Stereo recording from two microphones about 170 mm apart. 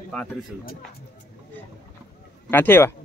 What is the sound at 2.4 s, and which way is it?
Speech, 10° left (ahead or behind).